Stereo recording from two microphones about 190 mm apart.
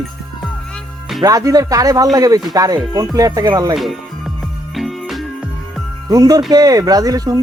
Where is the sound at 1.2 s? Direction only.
20° right (ahead or behind).